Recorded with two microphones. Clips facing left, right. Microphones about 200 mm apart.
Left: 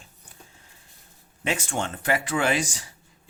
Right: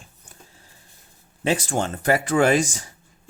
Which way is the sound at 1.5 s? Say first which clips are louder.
Right 5 dB; 35° right (ahead or behind).